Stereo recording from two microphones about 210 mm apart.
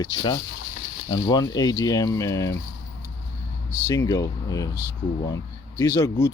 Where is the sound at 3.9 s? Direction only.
15° left (ahead or behind).